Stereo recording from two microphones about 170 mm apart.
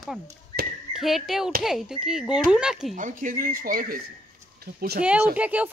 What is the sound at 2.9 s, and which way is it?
Speech, 50° right (ahead or behind).